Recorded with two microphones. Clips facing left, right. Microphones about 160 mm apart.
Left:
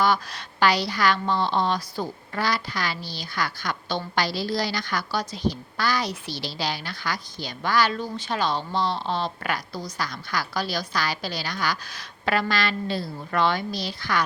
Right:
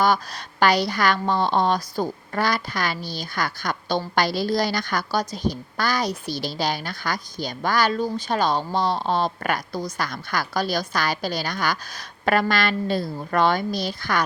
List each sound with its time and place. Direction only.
0.0 s a woman's voice: 45° right (ahead or behind)